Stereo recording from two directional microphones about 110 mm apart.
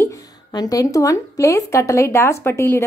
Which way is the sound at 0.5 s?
35° left (ahead or behind).